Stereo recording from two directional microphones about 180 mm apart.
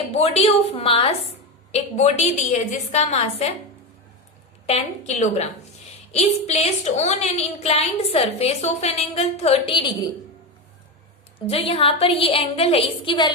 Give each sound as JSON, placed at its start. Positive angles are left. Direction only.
{"t": 0.1, "sound": "a woman's voice", "side_deg": 35}
{"t": 4.6, "sound": "a woman's voice", "side_deg": 35}
{"t": 11.3, "sound": "a woman's voice", "side_deg": 30}